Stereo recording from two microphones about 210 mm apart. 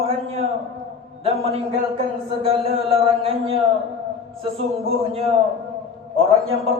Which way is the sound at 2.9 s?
25° right (ahead or behind).